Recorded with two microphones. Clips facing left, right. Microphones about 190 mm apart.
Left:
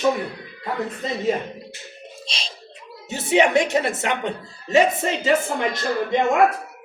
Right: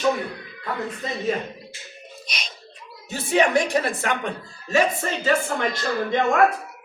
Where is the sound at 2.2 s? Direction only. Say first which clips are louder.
Left 1 dB; 30° left (ahead or behind).